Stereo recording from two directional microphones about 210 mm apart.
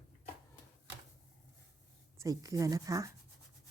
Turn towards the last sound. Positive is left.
turn(degrees=-15)  # may be behind; listen again after turning